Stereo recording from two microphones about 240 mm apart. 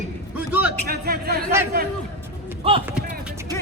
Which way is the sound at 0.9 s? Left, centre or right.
Right.